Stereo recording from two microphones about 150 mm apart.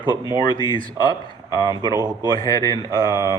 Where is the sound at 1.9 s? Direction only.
30° right (ahead or behind).